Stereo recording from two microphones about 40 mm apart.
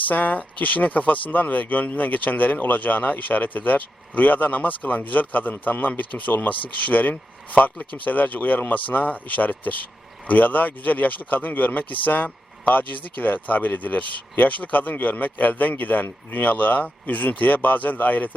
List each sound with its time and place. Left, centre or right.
0.1 s speech: left